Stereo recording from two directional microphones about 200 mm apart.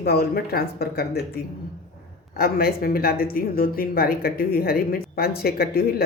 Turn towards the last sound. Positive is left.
turn(degrees=50)  # may be behind; listen again after turning